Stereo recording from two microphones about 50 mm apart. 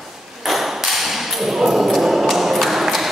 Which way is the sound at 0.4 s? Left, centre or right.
Centre.